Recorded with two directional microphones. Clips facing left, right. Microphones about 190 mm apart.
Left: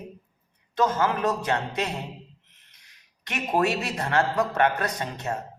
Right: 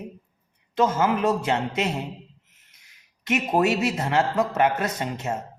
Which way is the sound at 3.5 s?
20° right (ahead or behind).